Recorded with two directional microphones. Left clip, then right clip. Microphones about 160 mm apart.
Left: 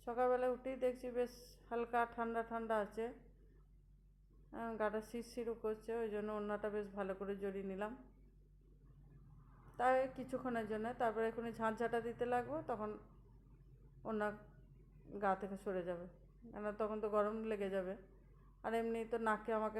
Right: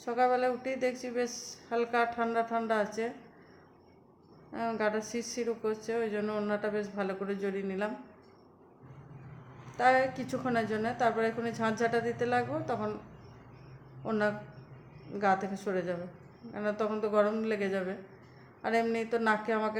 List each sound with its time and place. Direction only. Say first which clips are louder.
0.0 s a woman's voice: right 9 dB; 20° left (ahead or behind)
4.5 s a woman's voice: right 9 dB; 20° left (ahead or behind)
9.7 s a woman's voice: right 9 dB; 25° left (ahead or behind)
14.0 s a woman's voice: right 10 dB; 20° left (ahead or behind)